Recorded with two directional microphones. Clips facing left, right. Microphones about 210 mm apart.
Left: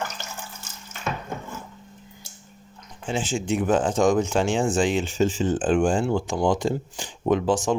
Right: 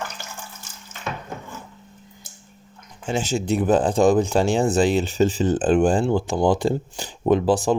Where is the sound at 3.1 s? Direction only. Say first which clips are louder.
Right 3 dB; 40° right (ahead or behind).